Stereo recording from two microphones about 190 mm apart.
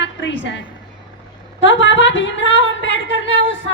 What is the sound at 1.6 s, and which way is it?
Speech, 70° left (ahead or behind).